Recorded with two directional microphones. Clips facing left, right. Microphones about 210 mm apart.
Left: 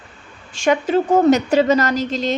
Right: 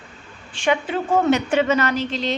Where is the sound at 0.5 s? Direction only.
40° left (ahead or behind).